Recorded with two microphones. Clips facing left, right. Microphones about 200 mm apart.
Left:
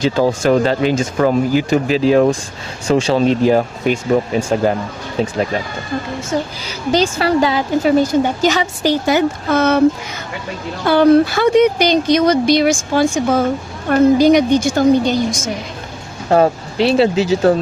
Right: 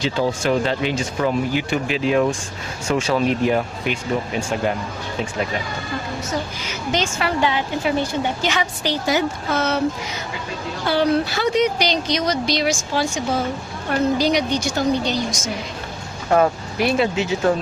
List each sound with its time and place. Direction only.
0.0 s a woman's voice: 45° left (ahead or behind)
6.7 s a woman's voice: 35° left (ahead or behind); by 9.8 s 55° left (ahead or behind)
10.8 s speech: 50° left (ahead or behind)
16.3 s a woman's voice: 30° left (ahead or behind)